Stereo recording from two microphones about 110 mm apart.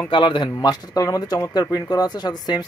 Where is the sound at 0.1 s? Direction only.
45° left (ahead or behind).